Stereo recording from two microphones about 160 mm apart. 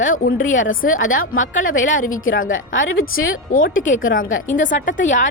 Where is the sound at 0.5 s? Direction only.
55° left (ahead or behind).